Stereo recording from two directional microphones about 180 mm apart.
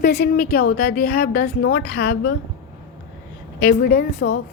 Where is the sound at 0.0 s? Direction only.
65° left (ahead or behind).